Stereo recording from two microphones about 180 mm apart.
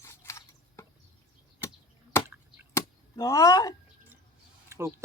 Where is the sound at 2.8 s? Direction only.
15° left (ahead or behind).